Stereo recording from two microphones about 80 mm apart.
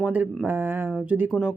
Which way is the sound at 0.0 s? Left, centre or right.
Centre.